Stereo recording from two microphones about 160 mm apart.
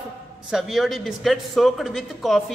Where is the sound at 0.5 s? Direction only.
Centre (ahead or behind).